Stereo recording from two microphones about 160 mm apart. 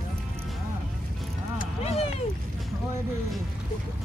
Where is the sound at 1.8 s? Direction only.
40° left (ahead or behind).